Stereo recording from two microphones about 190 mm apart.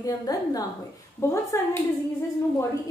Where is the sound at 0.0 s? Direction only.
20° left (ahead or behind).